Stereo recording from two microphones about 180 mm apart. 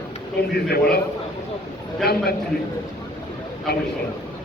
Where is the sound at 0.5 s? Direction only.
60° left (ahead or behind).